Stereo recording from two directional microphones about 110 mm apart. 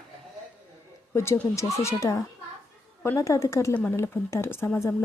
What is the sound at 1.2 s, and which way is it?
Speech, 25° left (ahead or behind).